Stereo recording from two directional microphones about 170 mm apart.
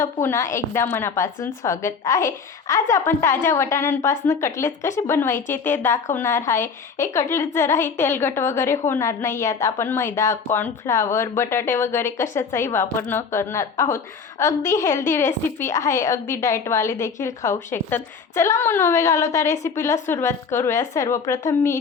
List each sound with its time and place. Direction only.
0.0 s speech: 15° left (ahead or behind)